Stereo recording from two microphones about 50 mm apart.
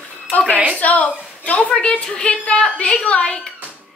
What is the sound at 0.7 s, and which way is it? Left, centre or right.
Speech, left.